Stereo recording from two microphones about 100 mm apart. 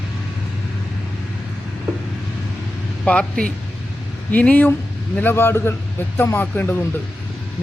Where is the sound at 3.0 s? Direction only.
10° left (ahead or behind).